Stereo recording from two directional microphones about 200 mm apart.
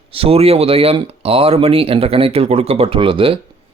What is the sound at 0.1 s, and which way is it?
Speech, 30° right (ahead or behind).